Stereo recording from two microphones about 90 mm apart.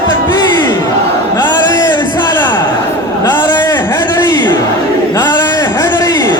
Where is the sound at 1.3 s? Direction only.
50° left (ahead or behind).